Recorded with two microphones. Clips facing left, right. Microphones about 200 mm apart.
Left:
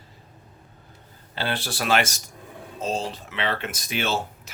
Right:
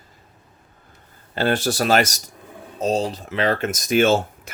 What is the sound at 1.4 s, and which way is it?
Speech, 45° right (ahead or behind).